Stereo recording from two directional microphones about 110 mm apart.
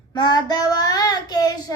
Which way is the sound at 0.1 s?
40° left (ahead or behind).